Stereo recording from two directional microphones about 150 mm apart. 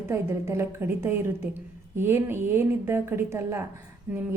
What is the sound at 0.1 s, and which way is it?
Speech, 15° right (ahead or behind).